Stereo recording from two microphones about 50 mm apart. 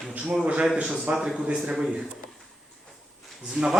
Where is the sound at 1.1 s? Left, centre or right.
Centre.